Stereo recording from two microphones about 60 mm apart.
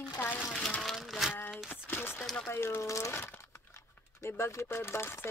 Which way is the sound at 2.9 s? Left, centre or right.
Left.